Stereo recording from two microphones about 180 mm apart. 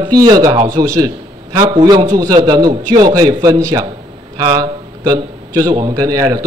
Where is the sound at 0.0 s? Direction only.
20° right (ahead or behind).